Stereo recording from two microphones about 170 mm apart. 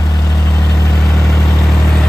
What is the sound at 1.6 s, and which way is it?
Vehicle, 5° left (ahead or behind).